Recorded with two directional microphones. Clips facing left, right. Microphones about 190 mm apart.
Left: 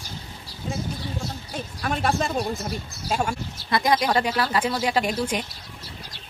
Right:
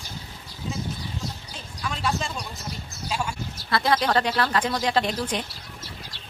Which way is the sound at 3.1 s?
50° left (ahead or behind).